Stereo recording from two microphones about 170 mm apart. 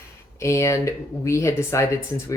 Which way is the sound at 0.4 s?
15° left (ahead or behind).